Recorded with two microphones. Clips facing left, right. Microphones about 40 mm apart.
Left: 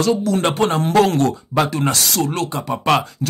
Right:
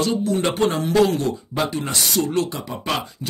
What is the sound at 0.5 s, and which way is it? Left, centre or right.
Speech, left.